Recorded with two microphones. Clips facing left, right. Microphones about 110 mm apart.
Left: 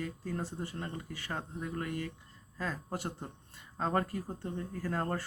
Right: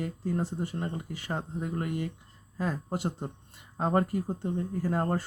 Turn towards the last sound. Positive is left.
turn(degrees=-20)  # may be behind; listen again after turning